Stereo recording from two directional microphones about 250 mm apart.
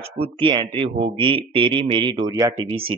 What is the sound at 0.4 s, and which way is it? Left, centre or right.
Speech, centre.